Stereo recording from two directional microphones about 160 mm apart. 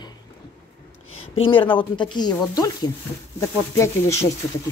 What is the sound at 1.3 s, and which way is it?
Speech, 35° left (ahead or behind).